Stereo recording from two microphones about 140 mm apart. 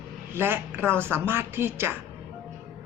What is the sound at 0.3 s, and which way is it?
Speech, 15° right (ahead or behind).